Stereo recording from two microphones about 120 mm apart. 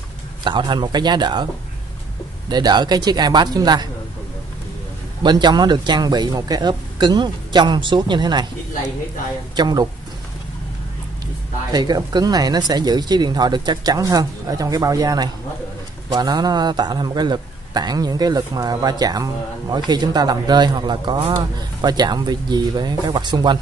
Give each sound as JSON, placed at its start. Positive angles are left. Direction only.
{"t": 0.4, "sound": "a man's voice", "side_deg": -40}
{"t": 2.5, "sound": "a man's voice", "side_deg": -35}
{"t": 5.2, "sound": "a man's voice", "side_deg": -35}
{"t": 9.6, "sound": "a man's voice", "side_deg": -35}
{"t": 11.7, "sound": "a man's voice", "side_deg": -35}